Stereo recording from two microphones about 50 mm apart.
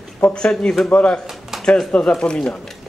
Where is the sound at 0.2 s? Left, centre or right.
Left.